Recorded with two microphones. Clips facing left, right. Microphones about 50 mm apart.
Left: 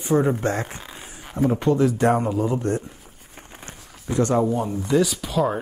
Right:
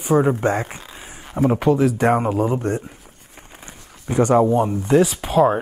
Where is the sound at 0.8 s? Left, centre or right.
Centre.